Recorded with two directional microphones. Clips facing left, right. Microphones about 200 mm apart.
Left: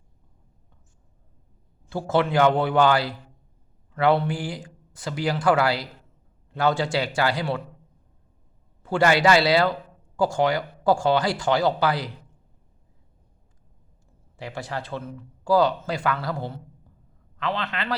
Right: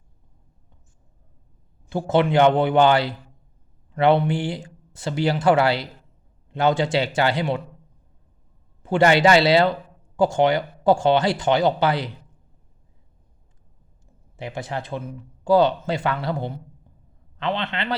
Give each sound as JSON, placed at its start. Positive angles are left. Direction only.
{"t": 1.9, "sound": "speech", "side_deg": -20}
{"t": 8.8, "sound": "speech", "side_deg": -20}
{"t": 14.3, "sound": "speech", "side_deg": -20}